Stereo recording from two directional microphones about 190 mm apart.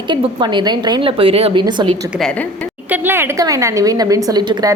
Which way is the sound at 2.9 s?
10° right (ahead or behind).